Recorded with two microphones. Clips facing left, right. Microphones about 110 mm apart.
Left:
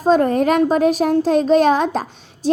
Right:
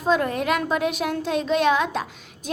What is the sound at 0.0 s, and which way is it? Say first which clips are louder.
A woman's voice: left 7 dB; 40° left (ahead or behind).